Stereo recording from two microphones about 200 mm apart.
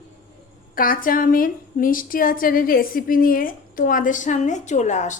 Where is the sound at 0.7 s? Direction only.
45° left (ahead or behind).